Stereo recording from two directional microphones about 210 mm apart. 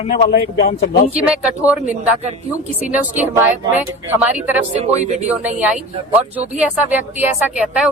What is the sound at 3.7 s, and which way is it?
Speech, 10° right (ahead or behind).